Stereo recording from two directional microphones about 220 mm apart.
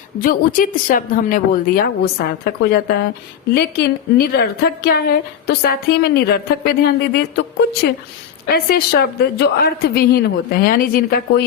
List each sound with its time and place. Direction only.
0.2 s a woman's voice: 40° left (ahead or behind)